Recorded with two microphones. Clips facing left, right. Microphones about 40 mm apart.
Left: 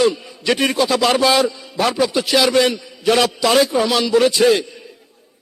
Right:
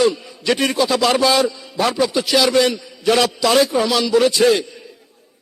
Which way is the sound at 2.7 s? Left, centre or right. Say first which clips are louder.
Even; centre.